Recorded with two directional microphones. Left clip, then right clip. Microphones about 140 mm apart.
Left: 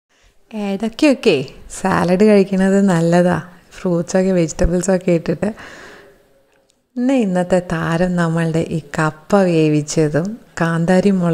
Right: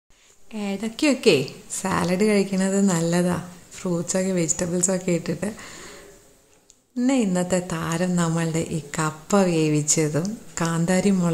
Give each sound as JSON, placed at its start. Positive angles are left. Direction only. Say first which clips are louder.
{"t": 0.5, "sound": "speech", "louder": "left 7 dB", "side_deg": 45}
{"t": 7.1, "sound": "a woman's voice", "louder": "left 7 dB", "side_deg": 40}
{"t": 10.5, "sound": "a sound", "louder": "left 8 dB", "side_deg": 40}
{"t": 10.9, "sound": "a woman's voice", "louder": "left 8 dB", "side_deg": 40}